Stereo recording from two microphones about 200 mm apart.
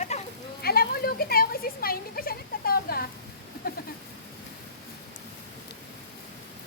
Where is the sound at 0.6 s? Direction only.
50° left (ahead or behind).